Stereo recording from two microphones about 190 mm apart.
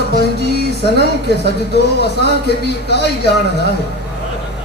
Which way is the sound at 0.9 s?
60° left (ahead or behind).